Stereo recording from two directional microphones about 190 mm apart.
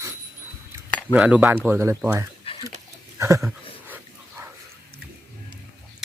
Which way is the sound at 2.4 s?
30° left (ahead or behind).